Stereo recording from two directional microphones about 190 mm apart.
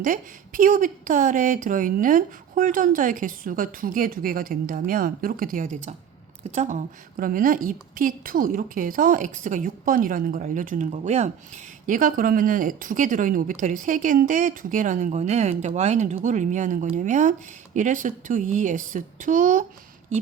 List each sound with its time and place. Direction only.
0.0 s a woman's voice: 45° right (ahead or behind)